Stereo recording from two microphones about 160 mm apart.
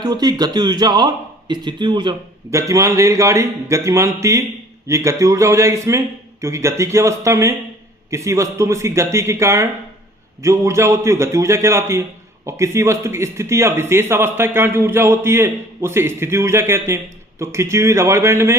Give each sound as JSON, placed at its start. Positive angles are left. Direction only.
{"t": 0.0, "sound": "a man's voice", "side_deg": -25}